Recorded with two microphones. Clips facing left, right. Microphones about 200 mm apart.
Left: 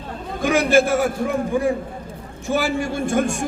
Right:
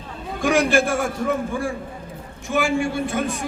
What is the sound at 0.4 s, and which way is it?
Speech, centre (ahead or behind).